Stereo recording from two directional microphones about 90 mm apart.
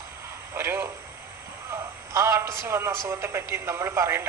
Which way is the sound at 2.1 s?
30° right (ahead or behind).